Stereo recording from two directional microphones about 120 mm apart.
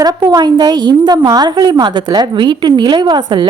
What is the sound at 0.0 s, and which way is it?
A woman's voice, 30° right (ahead or behind).